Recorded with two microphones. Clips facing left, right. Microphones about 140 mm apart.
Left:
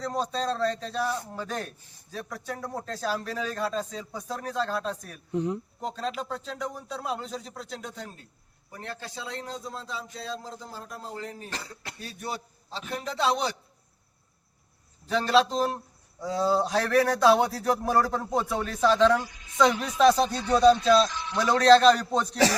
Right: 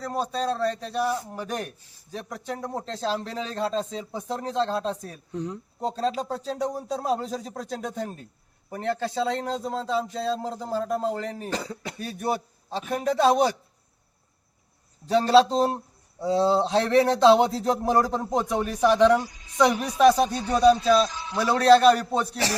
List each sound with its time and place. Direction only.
0.0 s a man's voice: 10° right (ahead or behind); by 5.2 s 25° right (ahead or behind)
5.3 s speech: 10° left (ahead or behind)
5.8 s speech: 35° right (ahead or behind)
8.7 s a man's voice: 55° right (ahead or behind); by 9.8 s 85° right
10.8 s speech: 90° right
11.9 s a man's voice: 55° right (ahead or behind)
15.0 s a man's voice: 35° right (ahead or behind); by 22.4 s 5° right (ahead or behind)